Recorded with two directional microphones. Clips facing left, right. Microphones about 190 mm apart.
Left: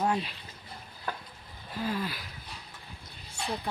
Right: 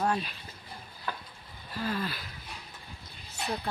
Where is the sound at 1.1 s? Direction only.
45° left (ahead or behind).